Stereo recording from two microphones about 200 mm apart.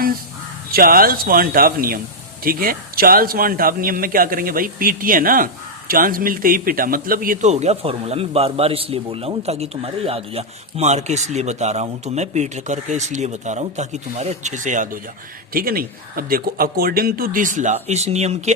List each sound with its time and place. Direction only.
0.7 s a man's voice: 45° right (ahead or behind)